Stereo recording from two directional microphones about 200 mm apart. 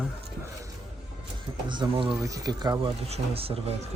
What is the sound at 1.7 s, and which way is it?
Speech, 25° right (ahead or behind).